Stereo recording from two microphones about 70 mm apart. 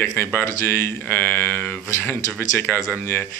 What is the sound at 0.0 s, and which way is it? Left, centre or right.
Speech, left.